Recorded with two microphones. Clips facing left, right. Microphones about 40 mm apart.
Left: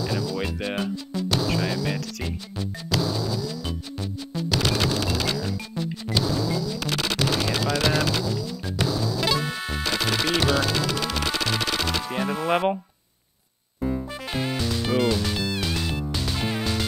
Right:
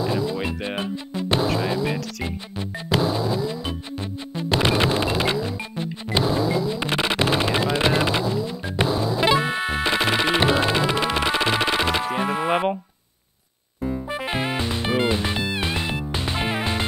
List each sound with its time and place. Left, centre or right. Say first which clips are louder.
0.0 s music: right 3 dB; right
14.1 s music: right 3 dB; right